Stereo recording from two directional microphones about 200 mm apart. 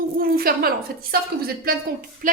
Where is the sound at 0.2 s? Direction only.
45° right (ahead or behind).